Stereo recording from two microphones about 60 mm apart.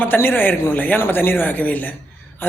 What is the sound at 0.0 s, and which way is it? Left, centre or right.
A man's voice, left.